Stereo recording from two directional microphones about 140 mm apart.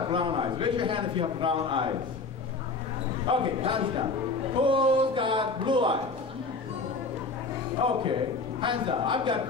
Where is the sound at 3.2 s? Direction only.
35° right (ahead or behind).